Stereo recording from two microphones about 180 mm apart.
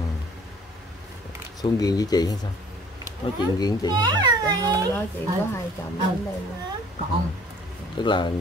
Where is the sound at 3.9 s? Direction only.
20° right (ahead or behind).